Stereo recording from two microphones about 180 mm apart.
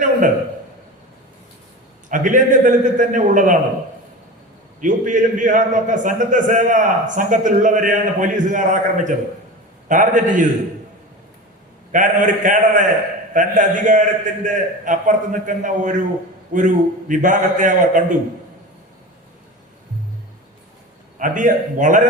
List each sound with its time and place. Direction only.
2.0 s a man's voice: 45° right (ahead or behind)
4.8 s a man's voice: 45° right (ahead or behind)
11.9 s a man's voice: 45° right (ahead or behind)
21.2 s a man's voice: 45° right (ahead or behind)